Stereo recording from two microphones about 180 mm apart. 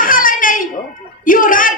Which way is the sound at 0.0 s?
50° left (ahead or behind).